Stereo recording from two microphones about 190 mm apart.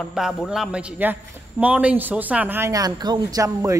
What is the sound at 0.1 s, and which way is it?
A man's voice, centre (ahead or behind).